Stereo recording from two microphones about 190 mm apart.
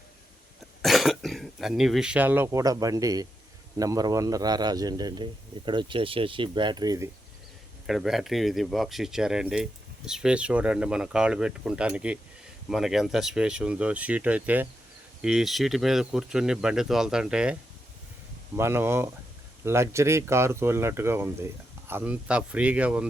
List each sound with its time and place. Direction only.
0.8 s a man's voice: centre (ahead or behind); by 7.1 s 20° right (ahead or behind)
7.9 s speech: centre (ahead or behind)